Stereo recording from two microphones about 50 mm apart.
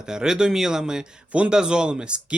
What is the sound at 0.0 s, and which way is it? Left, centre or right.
Speech, centre.